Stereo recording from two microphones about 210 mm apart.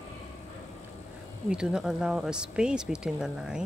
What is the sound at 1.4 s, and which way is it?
Speech, 5° right (ahead or behind).